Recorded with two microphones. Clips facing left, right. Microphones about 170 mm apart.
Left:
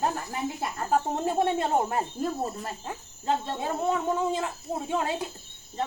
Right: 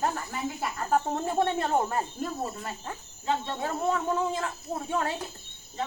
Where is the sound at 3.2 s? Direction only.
40° left (ahead or behind).